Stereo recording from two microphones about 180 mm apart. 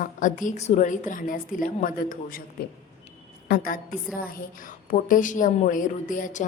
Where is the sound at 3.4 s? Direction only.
55° left (ahead or behind).